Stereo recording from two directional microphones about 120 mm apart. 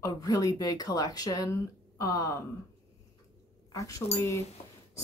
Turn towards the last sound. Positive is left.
turn(degrees=25)  # may be behind; listen again after turning